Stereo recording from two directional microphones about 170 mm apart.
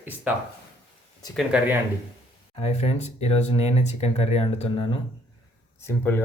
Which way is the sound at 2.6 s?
40° left (ahead or behind).